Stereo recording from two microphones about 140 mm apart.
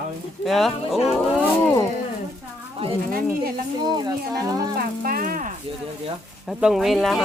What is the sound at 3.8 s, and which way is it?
Speech, 30° right (ahead or behind).